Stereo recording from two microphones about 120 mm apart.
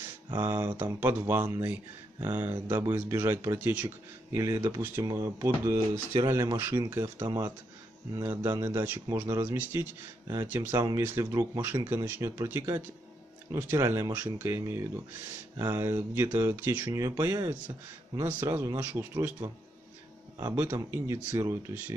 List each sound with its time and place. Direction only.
0.4 s speech: 20° right (ahead or behind)
20.3 s speech: 25° right (ahead or behind)